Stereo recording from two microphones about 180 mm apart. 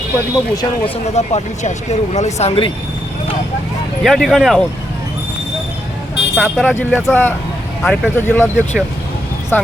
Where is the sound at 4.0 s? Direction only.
Centre (ahead or behind).